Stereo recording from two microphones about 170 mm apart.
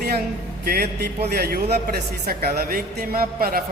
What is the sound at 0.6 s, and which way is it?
A woman's voice, 65° right (ahead or behind).